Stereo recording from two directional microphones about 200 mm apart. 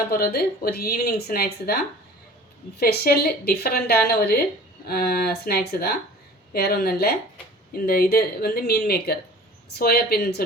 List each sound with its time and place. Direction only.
0.1 s a woman's voice: 50° left (ahead or behind)
2.7 s a woman's voice: 50° left (ahead or behind)